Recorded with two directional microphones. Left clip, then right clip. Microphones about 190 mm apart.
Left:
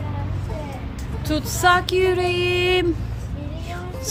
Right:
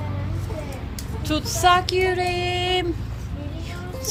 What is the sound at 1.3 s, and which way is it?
Child singing, 20° left (ahead or behind).